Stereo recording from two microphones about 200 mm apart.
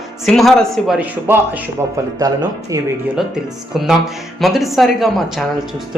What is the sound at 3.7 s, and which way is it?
Speech, centre (ahead or behind).